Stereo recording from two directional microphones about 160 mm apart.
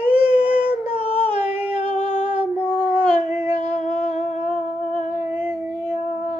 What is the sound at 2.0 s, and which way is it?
Female singing, 30° right (ahead or behind).